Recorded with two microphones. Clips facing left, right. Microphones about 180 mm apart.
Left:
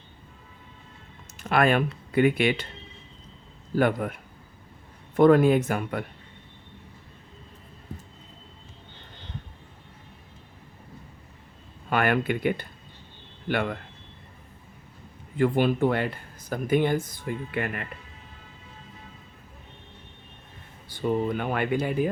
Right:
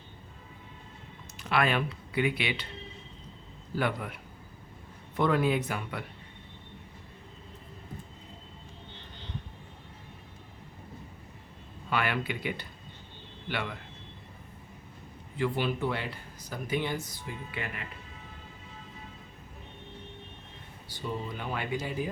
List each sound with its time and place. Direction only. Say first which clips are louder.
1.4 s speech: left 6 dB; 50° left (ahead or behind)
3.8 s speech: left 8 dB; 50° left (ahead or behind)
11.9 s speech: left 7 dB; 50° left (ahead or behind)
15.4 s speech: left 8 dB; 50° left (ahead or behind)
20.8 s speech: left 11 dB; 55° left (ahead or behind)